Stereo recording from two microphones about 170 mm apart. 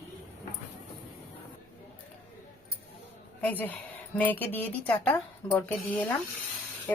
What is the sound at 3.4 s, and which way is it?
Speech, 10° left (ahead or behind).